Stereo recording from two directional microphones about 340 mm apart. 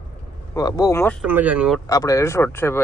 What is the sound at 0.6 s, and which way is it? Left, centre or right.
Speech, centre.